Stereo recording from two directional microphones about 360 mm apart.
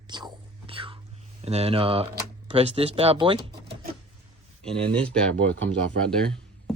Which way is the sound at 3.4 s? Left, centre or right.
Right.